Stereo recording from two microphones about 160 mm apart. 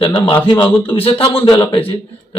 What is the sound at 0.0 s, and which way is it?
A man's voice, 25° left (ahead or behind).